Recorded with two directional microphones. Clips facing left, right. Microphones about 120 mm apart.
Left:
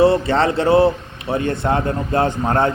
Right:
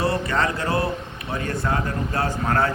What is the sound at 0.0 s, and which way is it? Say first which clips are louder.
A man's voice: left 8 dB; 25° left (ahead or behind).